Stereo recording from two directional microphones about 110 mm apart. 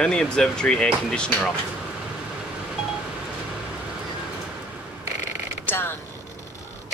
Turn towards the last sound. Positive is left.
turn(degrees=20)  # may be behind; listen again after turning